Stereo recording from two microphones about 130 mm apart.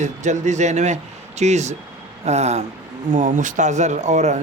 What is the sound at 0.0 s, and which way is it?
Speech, 65° right (ahead or behind).